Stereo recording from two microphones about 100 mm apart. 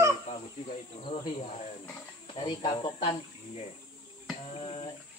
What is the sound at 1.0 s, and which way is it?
Speech, 65° left (ahead or behind).